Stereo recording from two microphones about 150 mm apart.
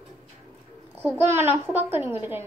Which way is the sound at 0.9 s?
15° right (ahead or behind).